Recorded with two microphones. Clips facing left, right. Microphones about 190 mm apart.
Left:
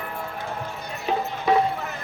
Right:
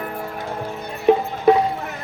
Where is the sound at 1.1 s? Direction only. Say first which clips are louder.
Right 8 dB; 55° right (ahead or behind).